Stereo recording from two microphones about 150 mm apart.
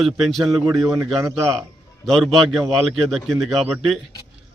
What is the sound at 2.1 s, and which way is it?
Speech, centre (ahead or behind).